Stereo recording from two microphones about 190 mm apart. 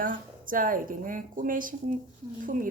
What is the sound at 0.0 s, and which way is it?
Speech, 45° right (ahead or behind).